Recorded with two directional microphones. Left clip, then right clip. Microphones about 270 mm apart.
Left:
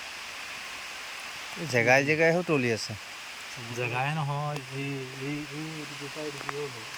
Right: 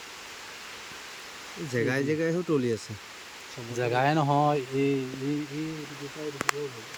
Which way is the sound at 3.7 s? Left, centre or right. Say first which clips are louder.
Right 6 dB; centre.